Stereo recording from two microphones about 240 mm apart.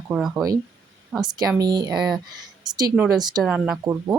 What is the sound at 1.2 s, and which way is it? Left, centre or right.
A woman's voice, centre.